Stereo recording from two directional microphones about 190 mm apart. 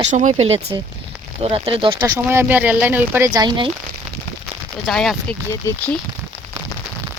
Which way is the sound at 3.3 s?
20° right (ahead or behind).